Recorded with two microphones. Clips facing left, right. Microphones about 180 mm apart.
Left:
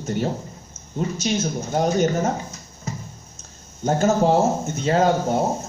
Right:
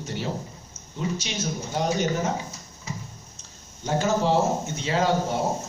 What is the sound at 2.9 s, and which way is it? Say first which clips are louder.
Music: left 4 dB; 45° left (ahead or behind).